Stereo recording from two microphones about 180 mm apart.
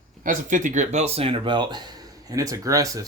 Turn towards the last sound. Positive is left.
turn(degrees=-20)  # may be behind; listen again after turning